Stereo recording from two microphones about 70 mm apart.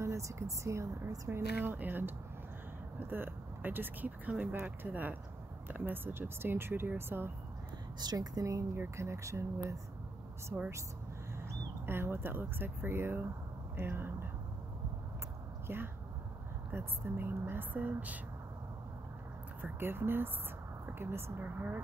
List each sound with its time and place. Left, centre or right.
0.0 s speech: right
1.3 s speech: right
8.0 s speech: right
11.3 s speech: right
15.6 s speech: right
19.6 s speech: right